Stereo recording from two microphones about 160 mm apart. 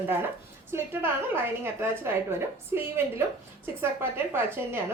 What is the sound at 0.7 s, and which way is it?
A woman's voice, 15° right (ahead or behind).